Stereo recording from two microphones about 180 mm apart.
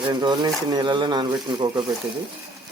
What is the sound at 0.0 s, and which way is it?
Speech, 25° right (ahead or behind).